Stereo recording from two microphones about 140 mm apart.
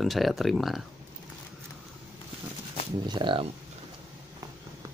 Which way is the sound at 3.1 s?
35° right (ahead or behind).